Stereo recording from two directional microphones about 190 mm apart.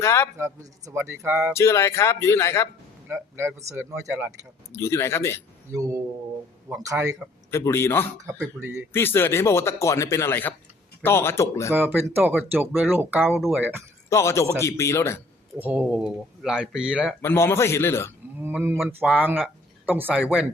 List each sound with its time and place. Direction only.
0.0 s speech: 15° left (ahead or behind)
0.3 s speech: 15° right (ahead or behind)
1.5 s speech: 15° left (ahead or behind)
3.1 s speech: 15° right (ahead or behind)
4.7 s speech: 15° left (ahead or behind)
5.7 s speech: 15° right (ahead or behind)
7.5 s speech: 15° left (ahead or behind)
11.7 s speech: 10° right (ahead or behind)
14.1 s speech: 15° left (ahead or behind)
15.5 s speech: 10° right (ahead or behind)
17.2 s speech: 15° left (ahead or behind)
18.4 s speech: 10° right (ahead or behind)